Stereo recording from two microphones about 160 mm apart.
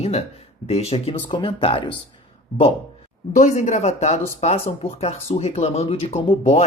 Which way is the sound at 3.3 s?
50° left (ahead or behind).